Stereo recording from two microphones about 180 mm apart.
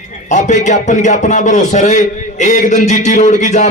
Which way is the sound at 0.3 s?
40° left (ahead or behind).